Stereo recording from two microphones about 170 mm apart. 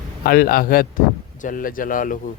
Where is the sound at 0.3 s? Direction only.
60° left (ahead or behind).